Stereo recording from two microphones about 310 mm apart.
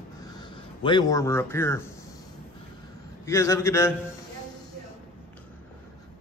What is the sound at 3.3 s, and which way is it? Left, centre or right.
Speech, centre.